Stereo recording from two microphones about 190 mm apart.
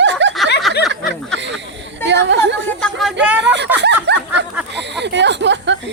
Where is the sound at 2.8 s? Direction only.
Centre (ahead or behind).